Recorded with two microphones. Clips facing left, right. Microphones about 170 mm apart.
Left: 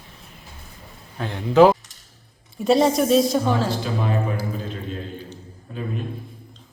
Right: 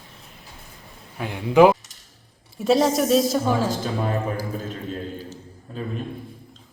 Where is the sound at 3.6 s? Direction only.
45° right (ahead or behind).